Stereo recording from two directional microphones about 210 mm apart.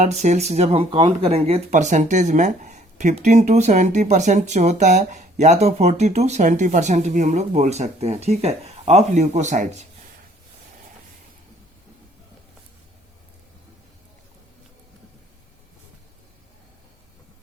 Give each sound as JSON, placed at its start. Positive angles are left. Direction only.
{"t": 0.0, "sound": "speech", "side_deg": -35}